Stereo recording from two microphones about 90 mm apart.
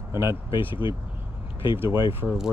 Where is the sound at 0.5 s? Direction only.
65° left (ahead or behind).